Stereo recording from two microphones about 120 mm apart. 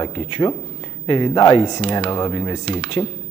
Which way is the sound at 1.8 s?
50° left (ahead or behind).